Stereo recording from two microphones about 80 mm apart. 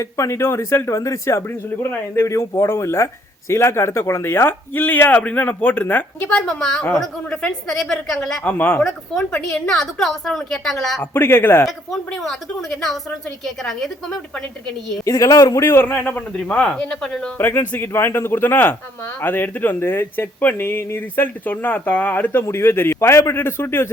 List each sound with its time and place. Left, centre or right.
0.0 s speech: left
6.4 s a woman's voice: centre
8.4 s speech: left
8.8 s a woman's voice: centre
11.0 s speech: left
11.9 s a woman's voice: centre
15.0 s speech: left; by 17.2 s centre
17.3 s speech: left